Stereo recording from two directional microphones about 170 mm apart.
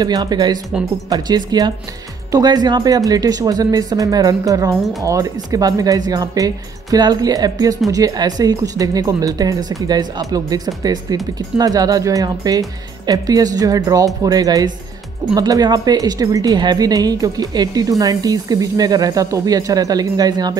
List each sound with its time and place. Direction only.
0.0 s speech: 25° right (ahead or behind)